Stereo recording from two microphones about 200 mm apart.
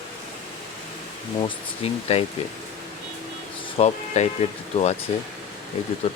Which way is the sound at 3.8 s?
30° left (ahead or behind).